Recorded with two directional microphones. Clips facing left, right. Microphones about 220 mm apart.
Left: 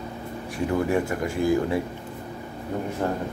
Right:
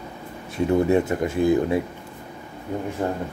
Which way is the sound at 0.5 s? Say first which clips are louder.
Right 5 dB; 25° right (ahead or behind).